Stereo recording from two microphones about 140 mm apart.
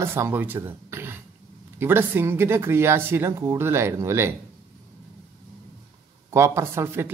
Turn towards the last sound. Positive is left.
turn(degrees=-20)  # may be behind; listen again after turning